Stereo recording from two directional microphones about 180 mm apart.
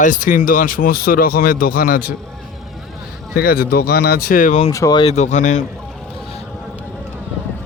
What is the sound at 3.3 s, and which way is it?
Speech, 55° left (ahead or behind).